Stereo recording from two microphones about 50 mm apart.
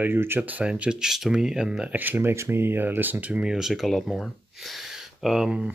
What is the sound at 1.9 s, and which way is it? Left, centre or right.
Speech, right.